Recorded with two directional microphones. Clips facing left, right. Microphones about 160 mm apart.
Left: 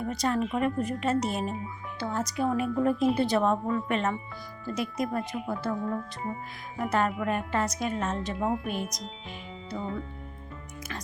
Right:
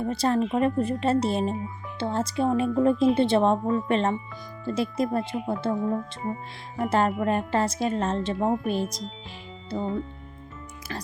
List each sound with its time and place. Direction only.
0.0 s a woman's voice: 30° right (ahead or behind)